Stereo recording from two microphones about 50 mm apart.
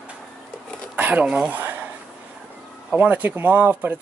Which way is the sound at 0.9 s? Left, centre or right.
Right.